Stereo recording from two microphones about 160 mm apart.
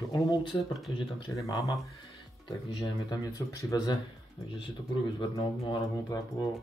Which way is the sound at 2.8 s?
25° left (ahead or behind).